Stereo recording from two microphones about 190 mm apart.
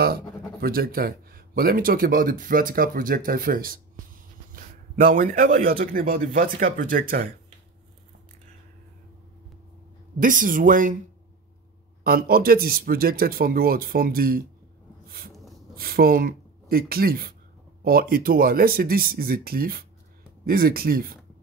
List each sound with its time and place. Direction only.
0.0 s a man's voice: 55° right (ahead or behind)
10.1 s speech: 45° right (ahead or behind)
12.0 s speech: 50° right (ahead or behind)
15.0 s a sound: 50° right (ahead or behind)
15.7 s speech: 50° right (ahead or behind)